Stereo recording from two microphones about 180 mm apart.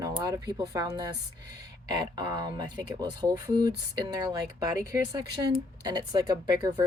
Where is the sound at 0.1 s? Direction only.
20° right (ahead or behind).